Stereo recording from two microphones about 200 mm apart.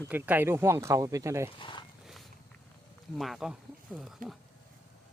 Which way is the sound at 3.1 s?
Centre (ahead or behind).